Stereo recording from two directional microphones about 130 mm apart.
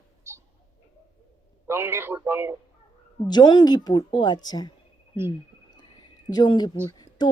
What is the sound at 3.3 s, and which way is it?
A woman's voice, 35° left (ahead or behind).